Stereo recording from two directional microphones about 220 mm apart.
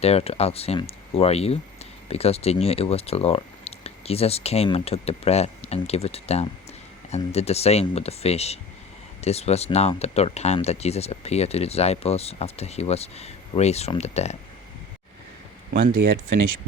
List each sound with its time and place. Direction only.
0.0 s speech: 25° left (ahead or behind)